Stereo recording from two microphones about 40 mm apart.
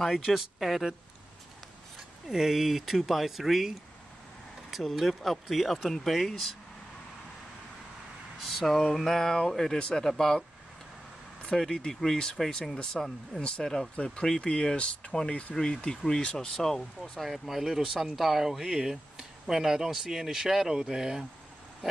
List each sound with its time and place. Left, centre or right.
0.3 s speech: centre
2.2 s speech: centre
8.5 s speech: centre
11.5 s speech: centre
13.9 s speech: left
17.2 s speech: centre